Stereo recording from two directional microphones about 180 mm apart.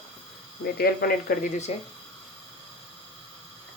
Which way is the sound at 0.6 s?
55° left (ahead or behind).